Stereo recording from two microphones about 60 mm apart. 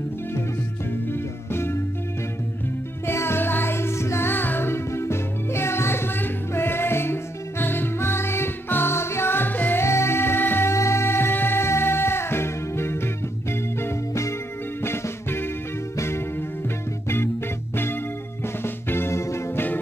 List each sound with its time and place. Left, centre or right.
1.0 s music: left
3.1 s music: left
4.3 s music: left
9.8 s music: left
10.7 s music: left
18.6 s music: left